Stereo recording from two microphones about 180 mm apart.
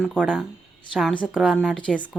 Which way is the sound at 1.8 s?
5° left (ahead or behind).